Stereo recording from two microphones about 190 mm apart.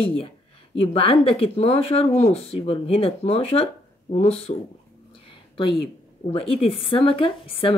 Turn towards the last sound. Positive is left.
turn(degrees=30)  # may be behind; listen again after turning